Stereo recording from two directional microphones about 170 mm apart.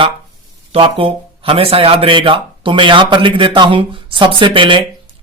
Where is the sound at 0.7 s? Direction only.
35° right (ahead or behind).